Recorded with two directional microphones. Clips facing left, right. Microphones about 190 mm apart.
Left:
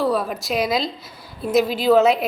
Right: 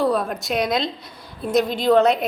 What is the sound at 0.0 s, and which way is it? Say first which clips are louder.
A woman's voice: even; centre (ahead or behind).